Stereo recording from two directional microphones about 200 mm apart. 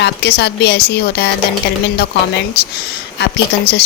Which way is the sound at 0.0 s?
55° left (ahead or behind).